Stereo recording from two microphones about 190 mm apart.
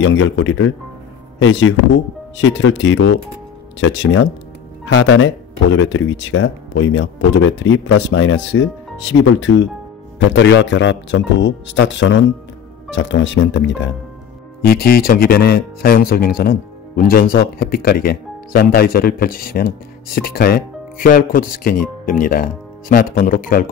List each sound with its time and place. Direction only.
0.0 s speech: 90° left
1.4 s speech: 80° left
10.1 s speech: 70° left (ahead or behind)
14.6 s speech: 55° left (ahead or behind)